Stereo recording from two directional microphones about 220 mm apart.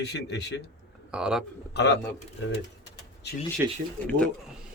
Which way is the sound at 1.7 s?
50° left (ahead or behind).